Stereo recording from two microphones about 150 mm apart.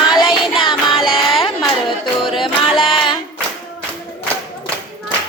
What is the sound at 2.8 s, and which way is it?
Child singing, 35° left (ahead or behind).